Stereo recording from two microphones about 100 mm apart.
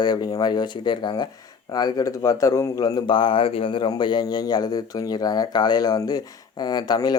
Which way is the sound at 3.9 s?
50° left (ahead or behind).